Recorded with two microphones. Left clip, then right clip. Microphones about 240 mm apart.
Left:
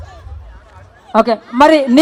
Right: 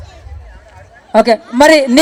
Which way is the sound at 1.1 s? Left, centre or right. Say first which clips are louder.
Right 3 dB; right.